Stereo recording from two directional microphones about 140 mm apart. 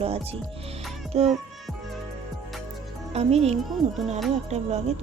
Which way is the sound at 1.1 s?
50° right (ahead or behind).